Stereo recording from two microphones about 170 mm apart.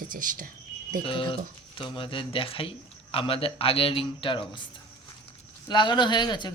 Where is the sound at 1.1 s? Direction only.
30° left (ahead or behind).